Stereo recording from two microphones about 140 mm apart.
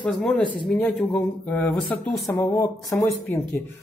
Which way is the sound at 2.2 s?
25° left (ahead or behind).